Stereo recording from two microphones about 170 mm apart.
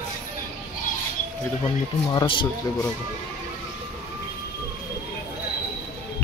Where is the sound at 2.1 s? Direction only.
25° left (ahead or behind).